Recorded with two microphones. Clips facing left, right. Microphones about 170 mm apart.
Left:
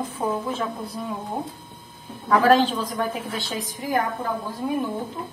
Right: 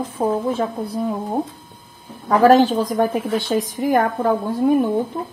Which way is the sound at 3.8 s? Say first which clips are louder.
Right 6 dB; 60° right (ahead or behind).